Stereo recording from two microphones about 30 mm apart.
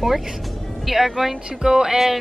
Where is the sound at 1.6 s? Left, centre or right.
Right.